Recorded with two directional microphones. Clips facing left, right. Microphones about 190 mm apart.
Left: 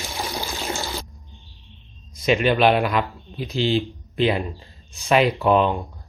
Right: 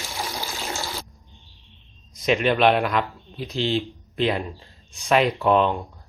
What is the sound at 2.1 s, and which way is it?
A man's voice, centre (ahead or behind).